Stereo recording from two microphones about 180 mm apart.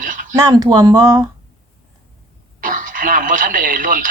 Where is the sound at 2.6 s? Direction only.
50° right (ahead or behind).